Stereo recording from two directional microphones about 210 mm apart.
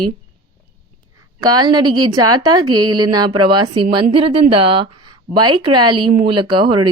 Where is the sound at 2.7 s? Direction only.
90° right.